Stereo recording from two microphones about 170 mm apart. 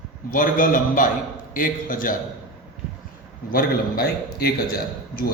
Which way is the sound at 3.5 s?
60° left (ahead or behind).